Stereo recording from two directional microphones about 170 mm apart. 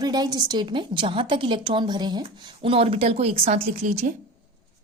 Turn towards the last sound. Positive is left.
turn(degrees=-40)  # may be behind; listen again after turning